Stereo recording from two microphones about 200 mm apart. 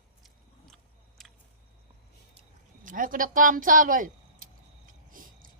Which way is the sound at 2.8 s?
40° right (ahead or behind).